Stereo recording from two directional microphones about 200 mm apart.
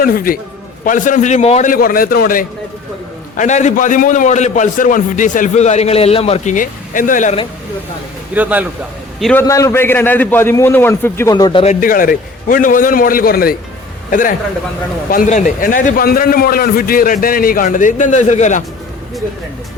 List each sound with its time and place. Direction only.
0.0 s a man's voice: 45° left (ahead or behind)
8.4 s a man's voice: 10° right (ahead or behind)
9.5 s a man's voice: 15° left (ahead or behind)
11.6 s a man's voice: 40° left (ahead or behind)